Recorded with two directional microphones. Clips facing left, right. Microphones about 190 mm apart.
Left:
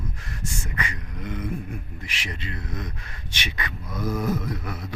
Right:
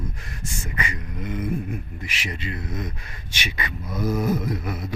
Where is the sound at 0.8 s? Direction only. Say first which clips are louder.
Right 4 dB; 5° right (ahead or behind).